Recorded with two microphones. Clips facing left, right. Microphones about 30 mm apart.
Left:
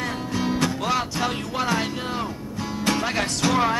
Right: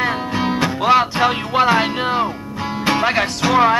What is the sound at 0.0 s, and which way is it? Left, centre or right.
Music, right.